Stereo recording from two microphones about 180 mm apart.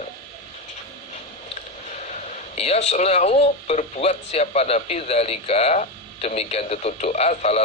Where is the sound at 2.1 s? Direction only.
40° left (ahead or behind).